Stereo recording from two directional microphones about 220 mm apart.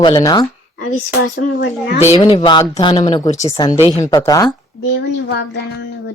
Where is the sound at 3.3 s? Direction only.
15° left (ahead or behind).